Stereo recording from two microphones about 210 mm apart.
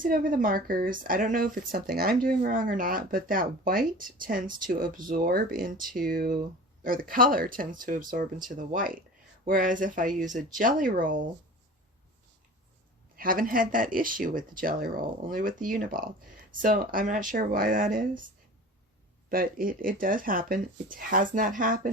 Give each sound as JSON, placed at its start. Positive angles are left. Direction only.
{"t": 0.0, "sound": "speech", "side_deg": -40}
{"t": 13.1, "sound": "speech", "side_deg": -40}
{"t": 19.3, "sound": "speech", "side_deg": -45}